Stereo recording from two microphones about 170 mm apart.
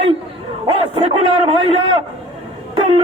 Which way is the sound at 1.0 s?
35° right (ahead or behind).